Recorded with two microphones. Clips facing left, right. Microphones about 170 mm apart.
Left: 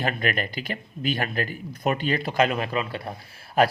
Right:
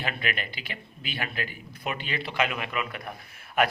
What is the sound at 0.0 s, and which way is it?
Speech, 45° left (ahead or behind).